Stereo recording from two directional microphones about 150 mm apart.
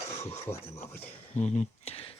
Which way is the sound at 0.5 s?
45° left (ahead or behind).